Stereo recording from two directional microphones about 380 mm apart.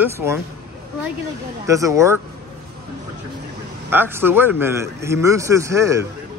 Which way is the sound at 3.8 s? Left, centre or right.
Centre.